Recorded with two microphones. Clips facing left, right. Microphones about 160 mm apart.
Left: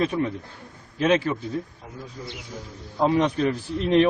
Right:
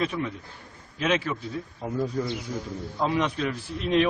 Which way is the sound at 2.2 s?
55° right (ahead or behind).